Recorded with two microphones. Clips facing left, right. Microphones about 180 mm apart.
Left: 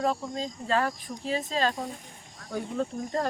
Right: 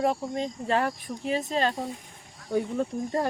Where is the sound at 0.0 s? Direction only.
20° right (ahead or behind).